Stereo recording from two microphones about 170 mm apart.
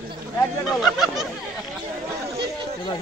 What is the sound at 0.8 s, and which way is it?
Speech, centre (ahead or behind).